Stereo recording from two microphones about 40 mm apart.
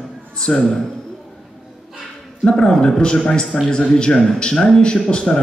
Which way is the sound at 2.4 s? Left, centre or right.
Left.